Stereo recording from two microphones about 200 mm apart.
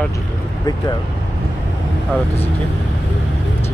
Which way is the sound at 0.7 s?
20° left (ahead or behind).